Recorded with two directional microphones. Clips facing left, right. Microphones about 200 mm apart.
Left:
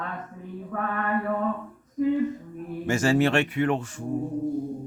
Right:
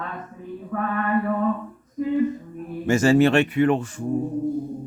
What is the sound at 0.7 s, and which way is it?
Mantra, 40° left (ahead or behind).